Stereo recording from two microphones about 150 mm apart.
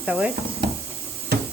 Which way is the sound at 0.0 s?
10° right (ahead or behind).